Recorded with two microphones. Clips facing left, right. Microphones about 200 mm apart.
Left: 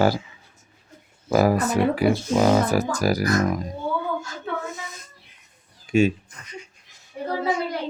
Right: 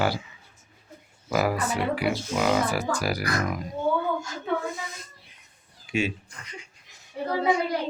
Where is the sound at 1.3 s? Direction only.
40° left (ahead or behind).